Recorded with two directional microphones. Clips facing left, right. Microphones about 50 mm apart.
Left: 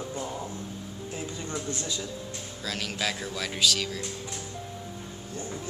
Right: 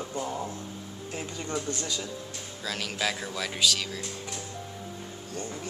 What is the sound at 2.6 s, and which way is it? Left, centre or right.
Speech, centre.